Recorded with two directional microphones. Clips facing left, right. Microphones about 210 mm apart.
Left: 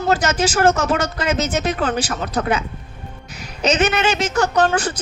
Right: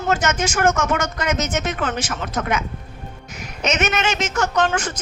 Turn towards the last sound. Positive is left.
turn(degrees=35)  # may be behind; listen again after turning